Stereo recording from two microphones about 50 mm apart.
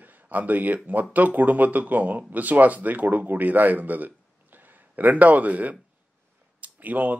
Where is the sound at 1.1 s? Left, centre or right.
Right.